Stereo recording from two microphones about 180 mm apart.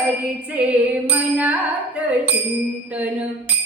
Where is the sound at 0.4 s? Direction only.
5° right (ahead or behind).